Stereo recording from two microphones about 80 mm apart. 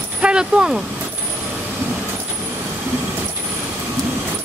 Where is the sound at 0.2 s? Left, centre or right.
Centre.